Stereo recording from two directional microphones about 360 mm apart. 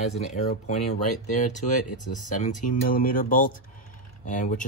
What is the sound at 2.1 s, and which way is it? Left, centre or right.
Speech, left.